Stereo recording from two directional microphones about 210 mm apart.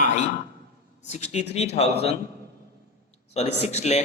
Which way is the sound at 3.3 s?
30° left (ahead or behind).